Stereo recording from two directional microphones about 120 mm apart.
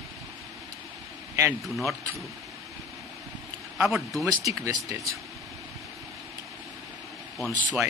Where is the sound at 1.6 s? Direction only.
Centre (ahead or behind).